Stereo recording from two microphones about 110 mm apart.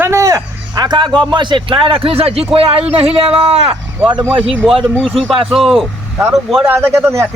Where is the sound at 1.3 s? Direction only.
45° right (ahead or behind); by 3.8 s 60° right (ahead or behind).